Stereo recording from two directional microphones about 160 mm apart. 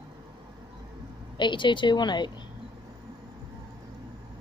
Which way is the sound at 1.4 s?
30° left (ahead or behind).